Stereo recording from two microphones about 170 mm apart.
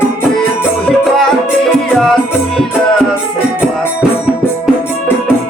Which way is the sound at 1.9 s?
5° left (ahead or behind).